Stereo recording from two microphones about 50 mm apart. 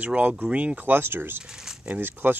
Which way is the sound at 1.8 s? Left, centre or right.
Right.